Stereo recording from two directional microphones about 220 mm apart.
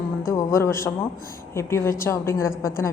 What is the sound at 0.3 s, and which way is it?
A woman's voice, 10° left (ahead or behind).